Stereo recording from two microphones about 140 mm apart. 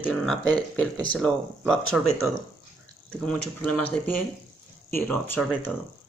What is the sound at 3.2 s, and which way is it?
Speech, 5° left (ahead or behind).